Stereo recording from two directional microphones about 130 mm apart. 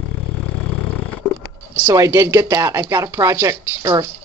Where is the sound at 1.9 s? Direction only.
20° right (ahead or behind).